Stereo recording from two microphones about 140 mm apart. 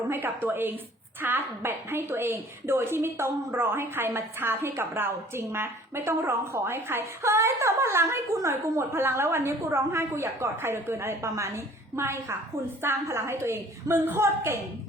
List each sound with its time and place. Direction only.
0.1 s a woman's voice: 15° right (ahead or behind)